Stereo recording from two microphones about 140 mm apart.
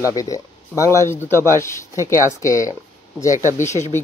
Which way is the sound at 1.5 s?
20° left (ahead or behind).